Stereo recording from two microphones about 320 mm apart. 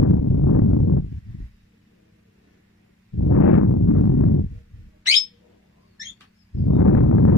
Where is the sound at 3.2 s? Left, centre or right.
Left.